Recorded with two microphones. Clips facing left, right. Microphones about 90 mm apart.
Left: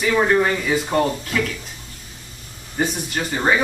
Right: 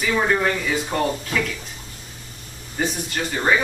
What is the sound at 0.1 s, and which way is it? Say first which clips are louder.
Speech: left 3 dB; 10° left (ahead or behind).